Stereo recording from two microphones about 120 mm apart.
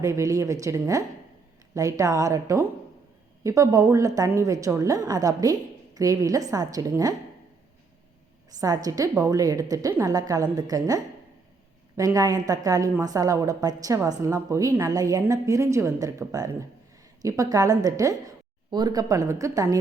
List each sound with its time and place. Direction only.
0.0 s a woman's voice: 25° right (ahead or behind)
8.4 s a woman's voice: 30° right (ahead or behind)